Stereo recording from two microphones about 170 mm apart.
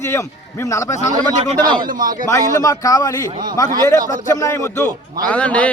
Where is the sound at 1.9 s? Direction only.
55° right (ahead or behind).